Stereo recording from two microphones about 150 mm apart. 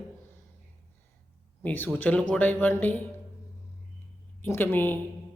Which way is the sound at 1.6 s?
10° left (ahead or behind).